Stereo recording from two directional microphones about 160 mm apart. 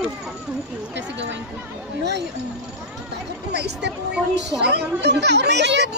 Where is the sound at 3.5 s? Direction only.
90° right.